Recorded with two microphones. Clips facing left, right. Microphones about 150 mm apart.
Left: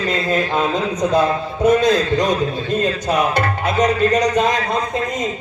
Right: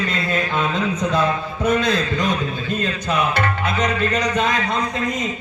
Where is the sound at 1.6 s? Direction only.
45° left (ahead or behind).